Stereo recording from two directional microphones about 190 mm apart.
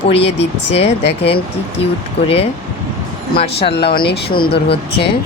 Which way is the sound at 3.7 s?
60° left (ahead or behind).